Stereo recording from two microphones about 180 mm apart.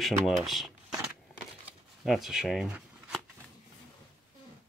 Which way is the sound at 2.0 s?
Centre (ahead or behind).